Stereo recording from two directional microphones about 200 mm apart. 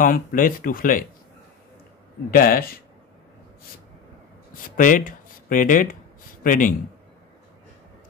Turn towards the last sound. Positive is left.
turn(degrees=40)  # may be behind; listen again after turning